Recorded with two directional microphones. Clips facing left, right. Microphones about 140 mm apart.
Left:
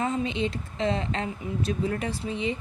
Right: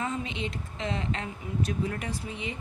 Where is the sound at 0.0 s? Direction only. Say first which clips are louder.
Left 6 dB; 30° left (ahead or behind).